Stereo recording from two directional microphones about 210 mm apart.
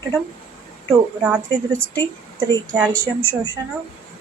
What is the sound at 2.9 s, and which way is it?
Speech, 10° left (ahead or behind).